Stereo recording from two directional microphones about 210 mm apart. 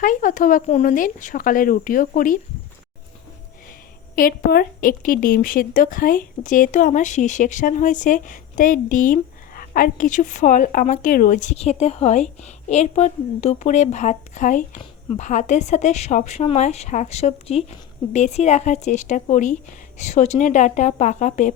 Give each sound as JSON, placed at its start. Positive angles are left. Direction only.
{"t": 0.0, "sound": "a woman's voice", "side_deg": 40}
{"t": 4.1, "sound": "a woman's voice", "side_deg": 45}